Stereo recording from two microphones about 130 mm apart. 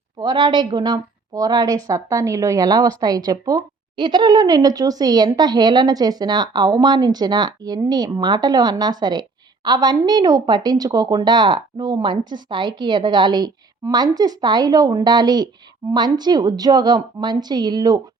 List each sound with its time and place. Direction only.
0.2 s a woman's voice: 35° right (ahead or behind)